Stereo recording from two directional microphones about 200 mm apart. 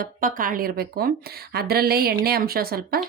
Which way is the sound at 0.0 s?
45° right (ahead or behind).